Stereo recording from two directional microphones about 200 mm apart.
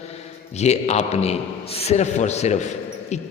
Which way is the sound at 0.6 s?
35° left (ahead or behind).